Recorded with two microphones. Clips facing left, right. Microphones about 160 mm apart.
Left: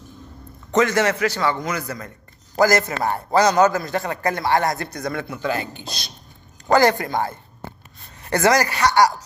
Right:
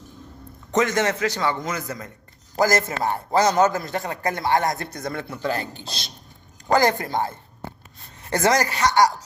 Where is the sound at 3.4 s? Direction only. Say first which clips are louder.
Left 2 dB; 80° left.